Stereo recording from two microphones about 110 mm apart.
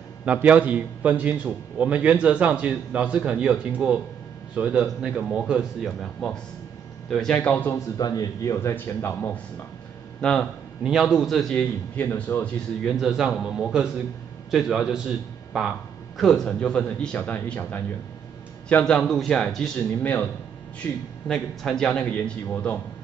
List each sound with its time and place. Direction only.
0.2 s a man's voice: 15° right (ahead or behind); by 7.7 s 15° left (ahead or behind)
7.7 s speech: 35° left (ahead or behind)
8.7 s speech: 20° left (ahead or behind)
10.2 s speech: 10° left (ahead or behind)
10.8 s a man's voice: 5° right (ahead or behind)
12.0 s speech: 15° left (ahead or behind)
12.5 s a man's voice: centre (ahead or behind)
16.2 s speech: 5° left (ahead or behind)